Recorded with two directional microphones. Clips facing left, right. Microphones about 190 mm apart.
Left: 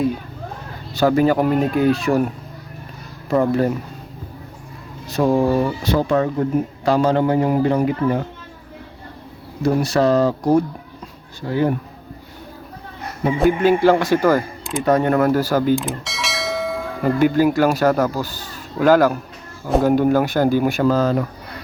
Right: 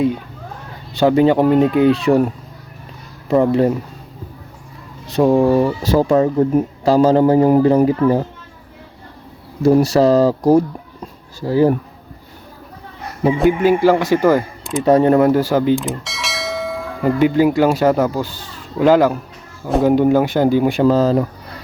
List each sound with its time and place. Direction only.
0.9 s speech: 25° right (ahead or behind)
5.1 s speech: 20° right (ahead or behind)
5.9 s a man's voice: 35° right (ahead or behind)
9.7 s a man's voice: 35° right (ahead or behind)
13.6 s a man's voice: 15° right (ahead or behind)
14.8 s speech: 30° right (ahead or behind)
15.7 s bell: centre (ahead or behind)
17.0 s speech: 20° right (ahead or behind)